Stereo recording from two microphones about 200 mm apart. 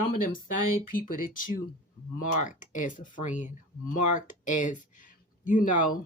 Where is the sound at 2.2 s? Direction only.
40° left (ahead or behind).